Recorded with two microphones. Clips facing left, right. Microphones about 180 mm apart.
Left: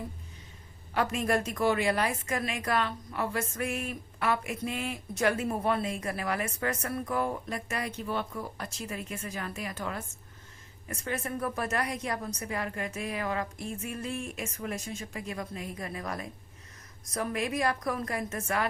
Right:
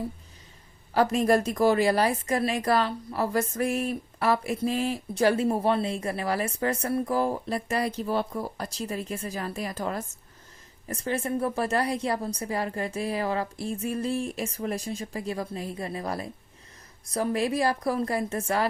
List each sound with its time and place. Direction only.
0.9 s speech: 35° right (ahead or behind)